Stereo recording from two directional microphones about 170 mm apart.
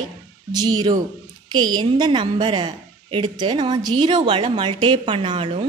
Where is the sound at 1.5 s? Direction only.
25° right (ahead or behind).